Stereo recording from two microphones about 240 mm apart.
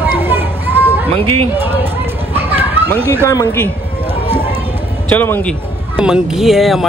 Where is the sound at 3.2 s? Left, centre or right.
Centre.